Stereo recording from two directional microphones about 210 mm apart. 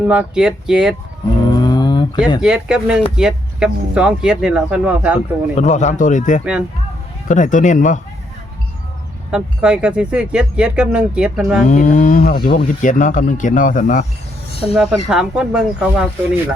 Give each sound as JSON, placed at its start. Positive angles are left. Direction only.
{"t": 0.0, "sound": "speech", "side_deg": -5}
{"t": 1.6, "sound": "a sound", "side_deg": 20}
{"t": 2.4, "sound": "speech", "side_deg": -5}
{"t": 5.5, "sound": "speech", "side_deg": 35}
{"t": 6.4, "sound": "speech", "side_deg": -5}
{"t": 7.3, "sound": "speech", "side_deg": 35}
{"t": 9.3, "sound": "speech", "side_deg": -5}
{"t": 11.7, "sound": "speech", "side_deg": 35}
{"t": 14.5, "sound": "speech", "side_deg": 25}
{"t": 14.8, "sound": "speech", "side_deg": -5}